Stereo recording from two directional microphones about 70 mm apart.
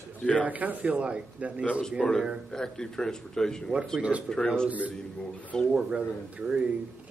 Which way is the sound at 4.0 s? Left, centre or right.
Centre.